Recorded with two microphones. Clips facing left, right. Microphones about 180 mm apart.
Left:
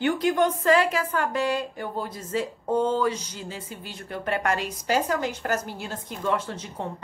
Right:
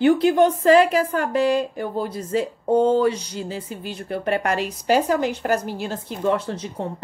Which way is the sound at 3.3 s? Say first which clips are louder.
Right 7 dB; 35° right (ahead or behind).